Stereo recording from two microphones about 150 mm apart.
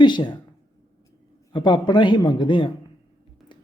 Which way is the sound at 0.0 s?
30° left (ahead or behind).